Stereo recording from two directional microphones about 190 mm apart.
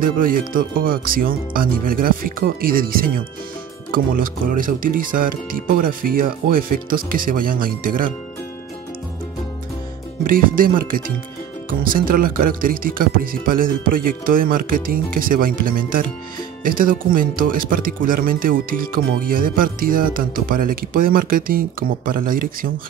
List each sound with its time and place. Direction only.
0.0 s speech: 45° right (ahead or behind)
10.3 s speech: 45° right (ahead or behind)